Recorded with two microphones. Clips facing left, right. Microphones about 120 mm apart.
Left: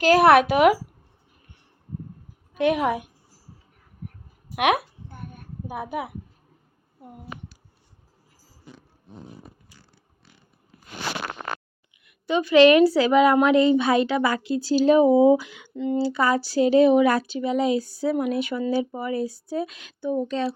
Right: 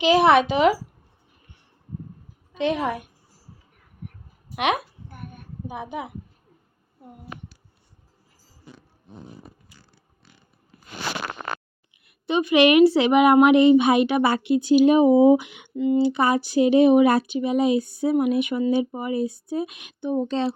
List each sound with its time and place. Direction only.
0.0 s speech: centre (ahead or behind)
2.6 s a child's voice: 10° left (ahead or behind)
4.5 s a woman's voice: 10° left (ahead or behind)
5.0 s a sound: 30° left (ahead or behind)
5.6 s a child's voice: 5° left (ahead or behind)
12.2 s a woman's voice: 20° right (ahead or behind)